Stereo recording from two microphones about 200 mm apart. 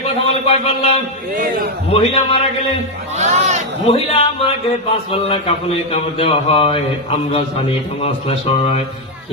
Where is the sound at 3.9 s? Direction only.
30° left (ahead or behind).